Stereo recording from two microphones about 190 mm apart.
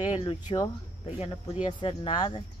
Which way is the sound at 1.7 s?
30° left (ahead or behind).